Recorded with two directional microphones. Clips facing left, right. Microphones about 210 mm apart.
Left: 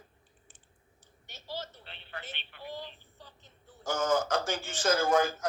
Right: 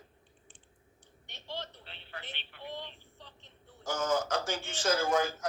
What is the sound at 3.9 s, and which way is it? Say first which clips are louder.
Speech: left 2 dB; 50° left (ahead or behind).